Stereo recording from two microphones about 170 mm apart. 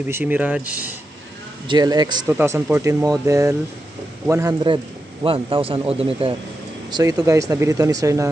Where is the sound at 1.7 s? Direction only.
25° right (ahead or behind).